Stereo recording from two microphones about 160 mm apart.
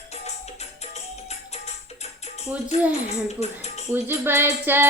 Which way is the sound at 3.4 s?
40° left (ahead or behind).